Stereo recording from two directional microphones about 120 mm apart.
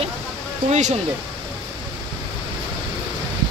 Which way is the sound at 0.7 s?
80° right.